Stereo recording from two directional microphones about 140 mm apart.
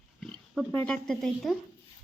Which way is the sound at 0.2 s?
Centre (ahead or behind).